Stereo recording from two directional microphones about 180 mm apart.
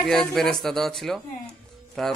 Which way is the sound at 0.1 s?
Centre (ahead or behind).